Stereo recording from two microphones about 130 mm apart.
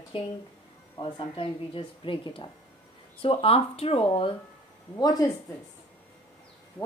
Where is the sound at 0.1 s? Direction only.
45° left (ahead or behind).